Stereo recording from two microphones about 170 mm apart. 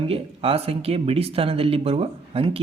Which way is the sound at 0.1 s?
35° right (ahead or behind).